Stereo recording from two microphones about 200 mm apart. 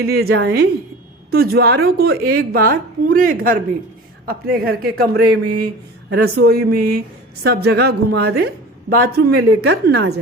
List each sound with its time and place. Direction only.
0.0 s a woman's voice: 50° right (ahead or behind)
6.1 s a woman's voice: 55° right (ahead or behind)